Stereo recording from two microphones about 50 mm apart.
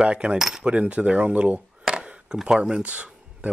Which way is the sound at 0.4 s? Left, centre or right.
Centre.